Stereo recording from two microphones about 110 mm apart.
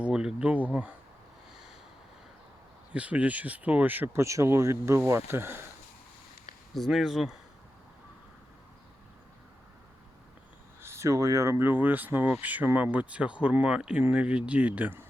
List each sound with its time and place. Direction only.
0.0 s a sound: 5° right (ahead or behind)
2.9 s speech: 10° right (ahead or behind)
6.7 s speech: centre (ahead or behind)
10.8 s speech: 25° right (ahead or behind)